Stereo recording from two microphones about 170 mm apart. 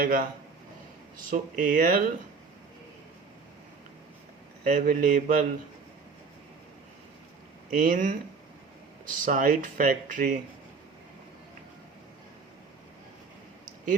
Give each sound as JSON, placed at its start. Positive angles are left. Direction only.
{"t": 0.0, "sound": "speech", "side_deg": -55}
{"t": 1.3, "sound": "speech", "side_deg": -50}
{"t": 4.6, "sound": "speech", "side_deg": -50}
{"t": 7.7, "sound": "speech", "side_deg": -50}
{"t": 9.2, "sound": "speech", "side_deg": -55}